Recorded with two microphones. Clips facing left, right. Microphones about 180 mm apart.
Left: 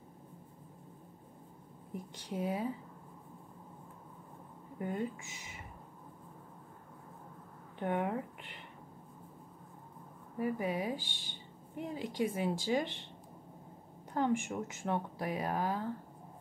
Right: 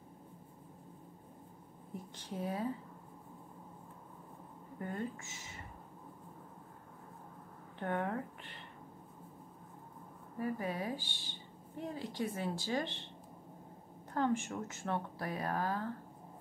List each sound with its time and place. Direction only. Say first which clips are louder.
2.1 s speech: left 3 dB; 15° left (ahead or behind)
4.7 s speech: left 3 dB; 10° left (ahead or behind)
7.8 s speech: left 2 dB; 15° left (ahead or behind)
10.4 s speech: left 3 dB; 15° left (ahead or behind)
14.1 s speech: left 2 dB; 15° left (ahead or behind)